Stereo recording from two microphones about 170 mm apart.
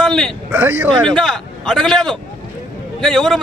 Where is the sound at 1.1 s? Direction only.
Centre (ahead or behind).